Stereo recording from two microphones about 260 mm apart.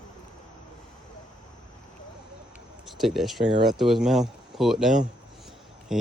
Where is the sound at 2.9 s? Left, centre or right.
Centre.